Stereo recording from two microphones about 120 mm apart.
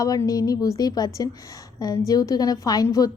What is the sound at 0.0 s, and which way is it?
A woman's voice, 30° left (ahead or behind).